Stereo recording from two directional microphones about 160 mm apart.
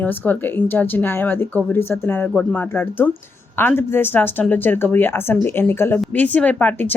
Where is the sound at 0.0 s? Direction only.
10° left (ahead or behind).